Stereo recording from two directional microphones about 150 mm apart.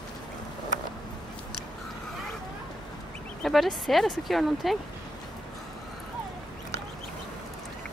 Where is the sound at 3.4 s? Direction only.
Centre (ahead or behind).